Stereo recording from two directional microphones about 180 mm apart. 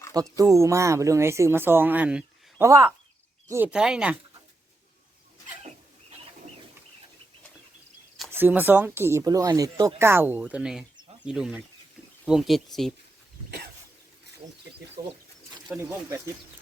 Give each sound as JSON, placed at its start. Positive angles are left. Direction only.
{"t": 0.1, "sound": "speech", "side_deg": -20}
{"t": 8.3, "sound": "speech", "side_deg": -10}
{"t": 15.0, "sound": "speech", "side_deg": -15}